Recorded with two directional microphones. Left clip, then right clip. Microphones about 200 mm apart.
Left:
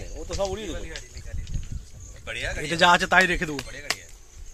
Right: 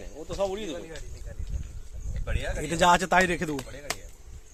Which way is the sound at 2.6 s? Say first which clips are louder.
Left 3 dB; 5° left (ahead or behind).